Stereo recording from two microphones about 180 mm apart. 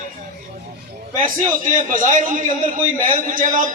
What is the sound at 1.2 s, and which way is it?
A man's voice, 50° right (ahead or behind).